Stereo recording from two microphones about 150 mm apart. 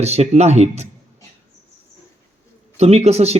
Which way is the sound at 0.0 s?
45° right (ahead or behind).